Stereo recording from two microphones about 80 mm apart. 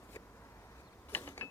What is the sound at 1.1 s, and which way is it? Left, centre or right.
Pulleys, left.